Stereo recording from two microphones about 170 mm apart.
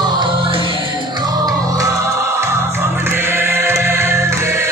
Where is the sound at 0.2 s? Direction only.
30° right (ahead or behind).